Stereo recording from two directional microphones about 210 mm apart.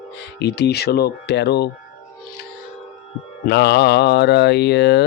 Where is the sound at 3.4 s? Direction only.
50° left (ahead or behind).